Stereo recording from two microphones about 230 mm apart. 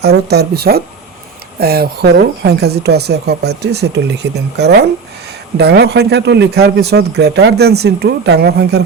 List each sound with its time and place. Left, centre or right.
0.0 s speech: right